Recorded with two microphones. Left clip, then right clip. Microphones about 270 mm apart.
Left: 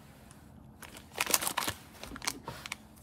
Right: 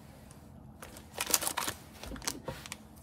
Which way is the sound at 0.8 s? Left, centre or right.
Centre.